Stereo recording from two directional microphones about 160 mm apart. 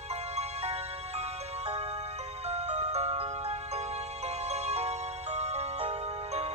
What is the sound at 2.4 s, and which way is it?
Music, 40° right (ahead or behind).